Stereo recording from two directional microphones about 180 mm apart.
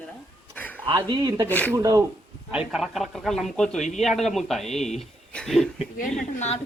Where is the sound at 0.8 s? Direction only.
25° right (ahead or behind).